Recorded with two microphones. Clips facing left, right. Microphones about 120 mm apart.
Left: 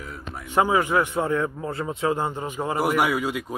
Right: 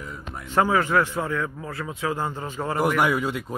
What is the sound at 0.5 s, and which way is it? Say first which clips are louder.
A man's voice: even; 15° left (ahead or behind).